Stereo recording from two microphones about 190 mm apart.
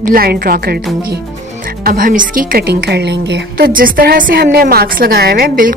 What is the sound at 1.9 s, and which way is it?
A woman's voice, 45° right (ahead or behind).